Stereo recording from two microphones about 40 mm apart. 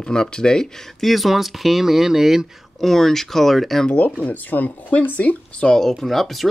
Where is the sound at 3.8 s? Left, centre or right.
Left.